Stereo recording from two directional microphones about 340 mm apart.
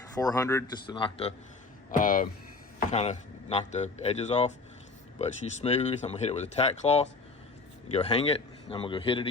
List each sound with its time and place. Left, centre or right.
0.2 s a man's voice: centre